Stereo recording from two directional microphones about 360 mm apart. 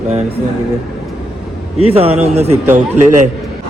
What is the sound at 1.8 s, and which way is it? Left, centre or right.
Speech, centre.